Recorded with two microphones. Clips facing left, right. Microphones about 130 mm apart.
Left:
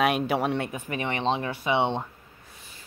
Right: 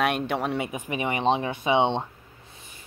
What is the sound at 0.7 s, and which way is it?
Speech, 15° right (ahead or behind).